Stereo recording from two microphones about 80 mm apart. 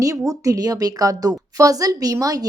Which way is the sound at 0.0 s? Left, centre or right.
Right.